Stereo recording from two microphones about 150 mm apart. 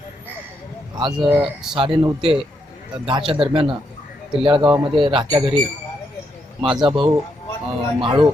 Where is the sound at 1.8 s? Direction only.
35° right (ahead or behind).